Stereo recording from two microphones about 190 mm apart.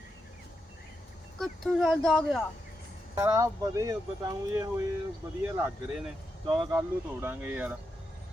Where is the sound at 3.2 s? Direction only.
15° right (ahead or behind).